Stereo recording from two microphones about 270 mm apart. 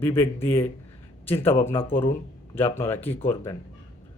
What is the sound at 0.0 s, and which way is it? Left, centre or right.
A man's voice, centre.